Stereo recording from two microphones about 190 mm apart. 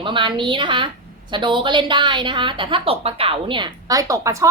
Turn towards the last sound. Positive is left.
turn(degrees=-15)  # may be behind; listen again after turning